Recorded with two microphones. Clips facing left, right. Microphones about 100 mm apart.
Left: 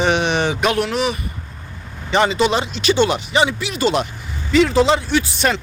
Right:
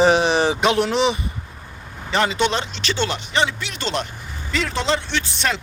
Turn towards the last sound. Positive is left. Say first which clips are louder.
# left 5 dB
turn(degrees=5)  # may be behind; listen again after turning